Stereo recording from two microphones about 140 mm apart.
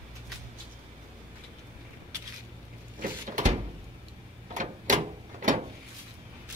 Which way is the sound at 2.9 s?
65° right (ahead or behind).